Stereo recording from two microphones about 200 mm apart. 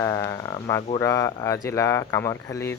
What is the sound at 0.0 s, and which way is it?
Speech, 15° left (ahead or behind).